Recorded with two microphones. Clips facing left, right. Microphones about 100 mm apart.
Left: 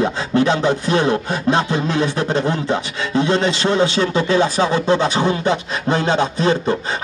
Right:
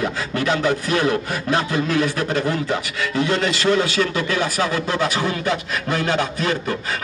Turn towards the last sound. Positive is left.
turn(degrees=25)  # may be behind; listen again after turning